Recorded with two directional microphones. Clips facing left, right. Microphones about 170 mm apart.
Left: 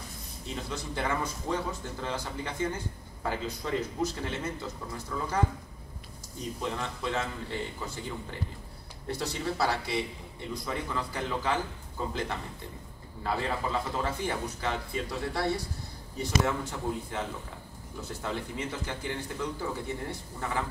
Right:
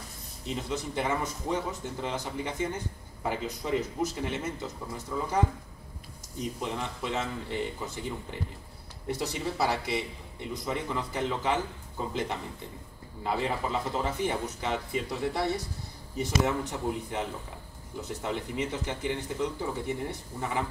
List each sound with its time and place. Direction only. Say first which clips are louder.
0.5 s speech: right 3 dB; 20° right (ahead or behind)
6.4 s speech: right 1 dB; 15° right (ahead or behind)